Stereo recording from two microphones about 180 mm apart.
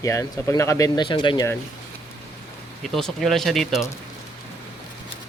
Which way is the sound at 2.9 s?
Centre (ahead or behind).